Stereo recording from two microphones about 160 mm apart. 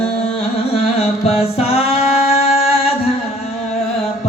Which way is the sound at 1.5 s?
40° left (ahead or behind).